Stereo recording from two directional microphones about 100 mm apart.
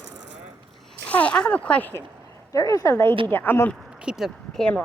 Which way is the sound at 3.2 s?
20° left (ahead or behind).